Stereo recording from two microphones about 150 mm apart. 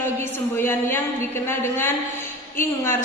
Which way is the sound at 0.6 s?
15° left (ahead or behind).